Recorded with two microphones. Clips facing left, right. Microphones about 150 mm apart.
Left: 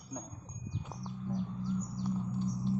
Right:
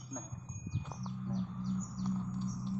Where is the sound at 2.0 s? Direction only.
Centre (ahead or behind).